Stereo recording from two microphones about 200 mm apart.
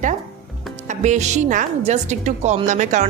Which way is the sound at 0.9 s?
35° right (ahead or behind).